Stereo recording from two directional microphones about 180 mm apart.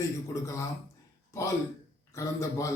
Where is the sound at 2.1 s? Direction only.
15° left (ahead or behind).